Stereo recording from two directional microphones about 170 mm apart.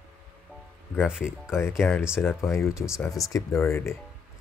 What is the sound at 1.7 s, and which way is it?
Speech, 5° left (ahead or behind).